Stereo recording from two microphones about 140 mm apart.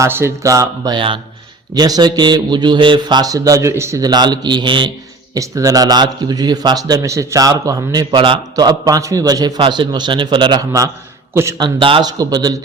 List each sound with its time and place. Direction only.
0.0 s speech: 15° right (ahead or behind); by 4.9 s 35° right (ahead or behind)
5.3 s speech: 25° right (ahead or behind)
8.1 s speech: 35° right (ahead or behind)
12.1 s speech: 30° right (ahead or behind)